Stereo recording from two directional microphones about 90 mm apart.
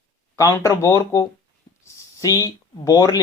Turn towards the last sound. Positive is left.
turn(degrees=40)  # may be behind; listen again after turning